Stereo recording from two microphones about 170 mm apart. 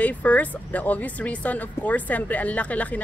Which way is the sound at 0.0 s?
10° left (ahead or behind).